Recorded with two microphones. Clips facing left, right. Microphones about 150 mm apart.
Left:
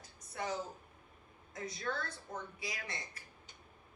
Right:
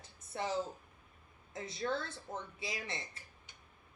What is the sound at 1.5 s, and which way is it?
A woman's voice, 25° right (ahead or behind).